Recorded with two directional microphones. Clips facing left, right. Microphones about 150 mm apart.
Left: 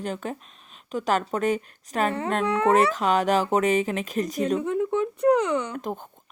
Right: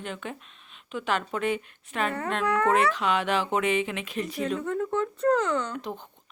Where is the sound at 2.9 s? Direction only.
40° left (ahead or behind).